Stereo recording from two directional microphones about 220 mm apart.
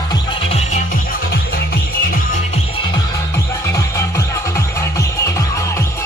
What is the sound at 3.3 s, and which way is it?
Music, 15° left (ahead or behind).